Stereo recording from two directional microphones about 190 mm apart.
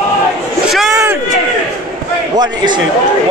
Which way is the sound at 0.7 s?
Centre (ahead or behind).